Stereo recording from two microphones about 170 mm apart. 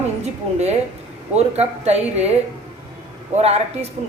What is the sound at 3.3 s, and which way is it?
Speech, 40° right (ahead or behind).